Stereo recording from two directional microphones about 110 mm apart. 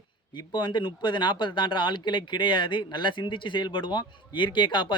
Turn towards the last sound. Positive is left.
turn(degrees=45)  # may be behind; listen again after turning